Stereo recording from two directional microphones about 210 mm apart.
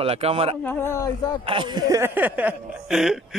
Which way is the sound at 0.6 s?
10° left (ahead or behind).